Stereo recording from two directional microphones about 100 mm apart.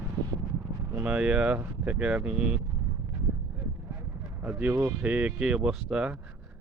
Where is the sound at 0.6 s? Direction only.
25° right (ahead or behind).